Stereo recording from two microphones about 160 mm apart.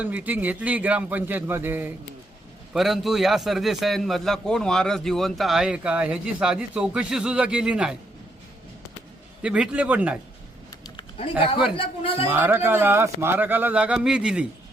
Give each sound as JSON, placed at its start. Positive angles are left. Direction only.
{"t": 0.0, "sound": "speech", "side_deg": -10}
{"t": 2.7, "sound": "a man's voice", "side_deg": 0}
{"t": 9.4, "sound": "speech", "side_deg": -5}
{"t": 10.7, "sound": "a sound", "side_deg": 25}
{"t": 11.2, "sound": "a man's voice", "side_deg": 35}
{"t": 12.3, "sound": "speech", "side_deg": -10}